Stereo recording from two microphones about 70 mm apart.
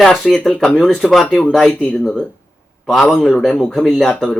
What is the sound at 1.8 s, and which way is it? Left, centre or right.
Speech, centre.